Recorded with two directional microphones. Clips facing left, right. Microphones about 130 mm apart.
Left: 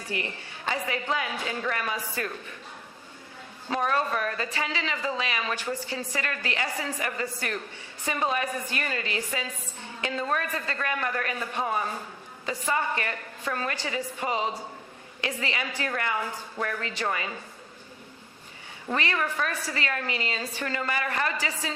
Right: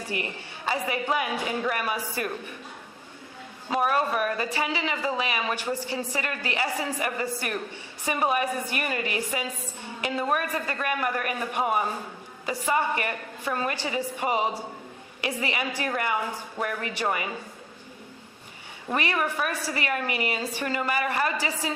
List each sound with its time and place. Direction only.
0.0 s a woman's voice: 15° right (ahead or behind)
3.7 s a woman's voice: 10° right (ahead or behind)
18.9 s a woman's voice: 15° right (ahead or behind)